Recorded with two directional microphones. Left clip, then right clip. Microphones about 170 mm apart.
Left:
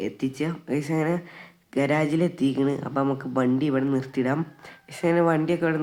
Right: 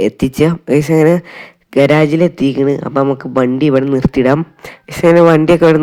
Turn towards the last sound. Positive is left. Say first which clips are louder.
# right 15 dB
turn(degrees=-45)  # may be behind; listen again after turning